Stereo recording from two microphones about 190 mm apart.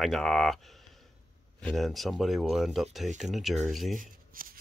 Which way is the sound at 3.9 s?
50° right (ahead or behind).